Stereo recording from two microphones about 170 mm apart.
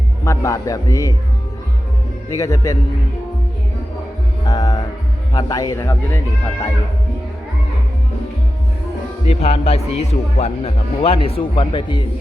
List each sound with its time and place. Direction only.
0.3 s a man's voice: 20° left (ahead or behind)
2.3 s a man's voice: 20° left (ahead or behind)
4.4 s music: 25° left (ahead or behind)
5.3 s a man's voice: 20° left (ahead or behind)
9.3 s speech: 35° left (ahead or behind)